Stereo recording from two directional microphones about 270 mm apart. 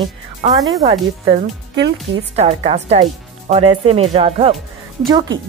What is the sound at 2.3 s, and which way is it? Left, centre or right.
Speech, right.